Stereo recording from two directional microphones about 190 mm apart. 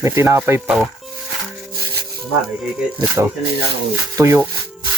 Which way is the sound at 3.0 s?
15° right (ahead or behind).